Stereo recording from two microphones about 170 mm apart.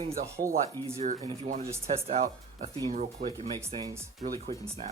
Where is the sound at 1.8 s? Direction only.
40° right (ahead or behind).